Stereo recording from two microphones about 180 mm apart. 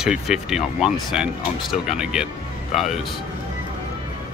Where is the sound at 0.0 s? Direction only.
5° right (ahead or behind).